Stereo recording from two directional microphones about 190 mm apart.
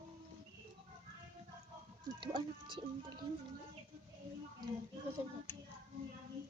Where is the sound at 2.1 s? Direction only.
25° right (ahead or behind).